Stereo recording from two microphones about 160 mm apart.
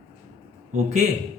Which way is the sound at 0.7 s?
45° right (ahead or behind).